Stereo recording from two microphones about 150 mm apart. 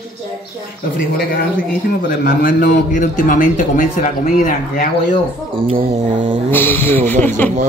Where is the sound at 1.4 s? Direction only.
75° left (ahead or behind).